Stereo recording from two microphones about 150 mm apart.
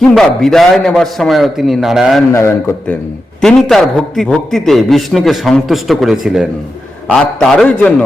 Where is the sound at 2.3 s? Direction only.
15° left (ahead or behind).